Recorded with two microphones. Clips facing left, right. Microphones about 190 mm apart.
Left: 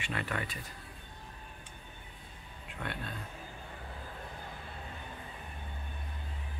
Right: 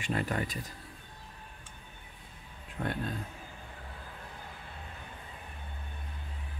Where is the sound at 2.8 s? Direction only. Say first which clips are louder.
Right 6 dB; 40° right (ahead or behind).